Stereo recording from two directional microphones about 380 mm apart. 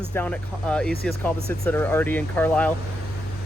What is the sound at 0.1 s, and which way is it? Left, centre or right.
Speech, centre.